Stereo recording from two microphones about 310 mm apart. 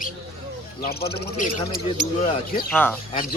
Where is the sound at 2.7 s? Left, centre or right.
Centre.